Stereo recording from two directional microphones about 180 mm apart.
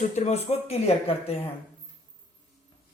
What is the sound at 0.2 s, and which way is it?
Speech, 35° left (ahead or behind).